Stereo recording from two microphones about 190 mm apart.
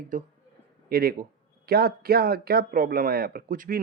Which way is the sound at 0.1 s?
45° right (ahead or behind).